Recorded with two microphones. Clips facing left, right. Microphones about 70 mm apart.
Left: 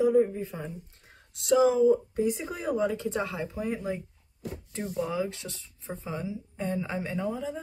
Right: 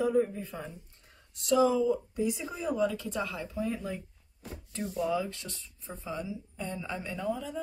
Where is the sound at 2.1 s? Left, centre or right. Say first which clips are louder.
Left 3 dB; left.